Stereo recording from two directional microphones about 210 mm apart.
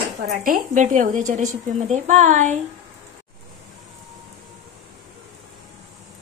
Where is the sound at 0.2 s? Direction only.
45° right (ahead or behind).